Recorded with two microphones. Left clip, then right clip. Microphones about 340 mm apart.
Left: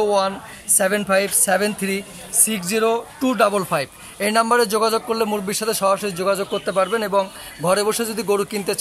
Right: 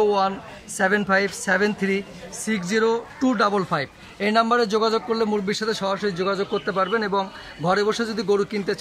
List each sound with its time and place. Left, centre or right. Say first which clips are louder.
0.0 s a woman's voice: left 1 dB; centre